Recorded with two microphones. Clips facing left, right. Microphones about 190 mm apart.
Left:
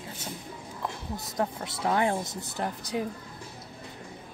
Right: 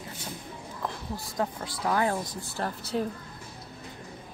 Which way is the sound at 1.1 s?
20° left (ahead or behind).